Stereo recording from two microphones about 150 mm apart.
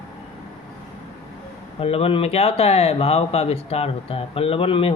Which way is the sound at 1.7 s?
40° left (ahead or behind).